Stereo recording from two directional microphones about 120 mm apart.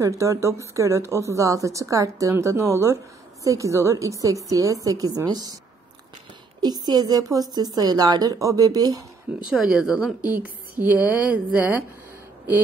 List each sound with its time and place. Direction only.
0.0 s a woman's voice: 25° right (ahead or behind)
6.6 s a woman's voice: 35° right (ahead or behind)
9.5 s speech: 5° right (ahead or behind)
10.2 s a woman's voice: 15° right (ahead or behind)